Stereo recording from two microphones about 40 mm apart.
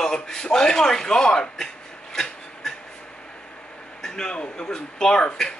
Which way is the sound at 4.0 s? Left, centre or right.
Centre.